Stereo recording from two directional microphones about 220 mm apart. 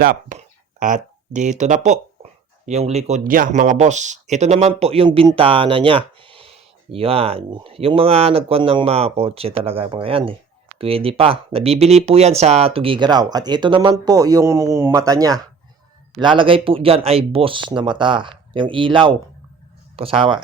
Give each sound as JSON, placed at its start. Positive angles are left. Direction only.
{"t": 0.0, "sound": "speech", "side_deg": -40}